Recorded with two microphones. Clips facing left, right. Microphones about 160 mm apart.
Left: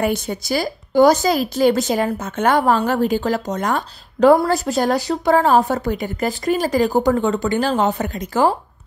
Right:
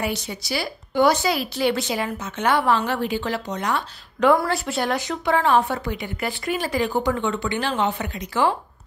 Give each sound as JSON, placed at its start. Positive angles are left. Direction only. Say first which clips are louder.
{"t": 0.0, "sound": "a woman's voice", "louder": "left 7 dB", "side_deg": 50}